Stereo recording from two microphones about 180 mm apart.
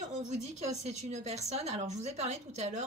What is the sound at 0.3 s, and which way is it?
A woman's voice, 40° right (ahead or behind).